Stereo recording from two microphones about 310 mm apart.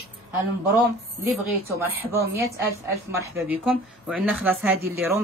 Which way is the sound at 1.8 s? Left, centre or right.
Centre.